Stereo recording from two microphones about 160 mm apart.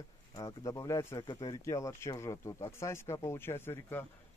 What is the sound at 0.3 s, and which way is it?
Speech, 20° left (ahead or behind).